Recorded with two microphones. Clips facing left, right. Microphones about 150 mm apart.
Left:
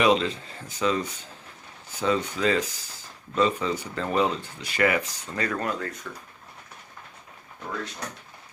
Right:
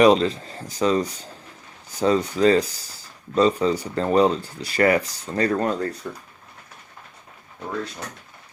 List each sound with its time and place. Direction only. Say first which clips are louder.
0.0 s speech: right 6 dB; 40° right (ahead or behind)